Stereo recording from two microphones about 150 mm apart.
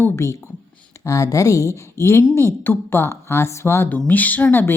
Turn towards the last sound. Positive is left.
turn(degrees=10)  # may be behind; listen again after turning